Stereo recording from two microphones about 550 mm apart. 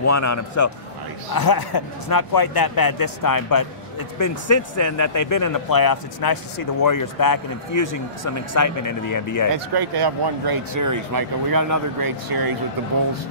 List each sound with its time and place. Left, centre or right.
0.0 s a man's voice: left
9.8 s speech: right